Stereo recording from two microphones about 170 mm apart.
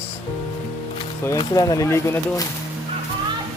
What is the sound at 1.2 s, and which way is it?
Speech, 20° left (ahead or behind).